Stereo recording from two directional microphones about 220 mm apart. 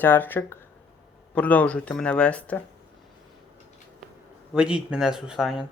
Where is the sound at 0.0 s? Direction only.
10° left (ahead or behind).